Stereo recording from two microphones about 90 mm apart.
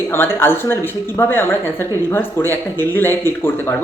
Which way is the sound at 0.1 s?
25° left (ahead or behind).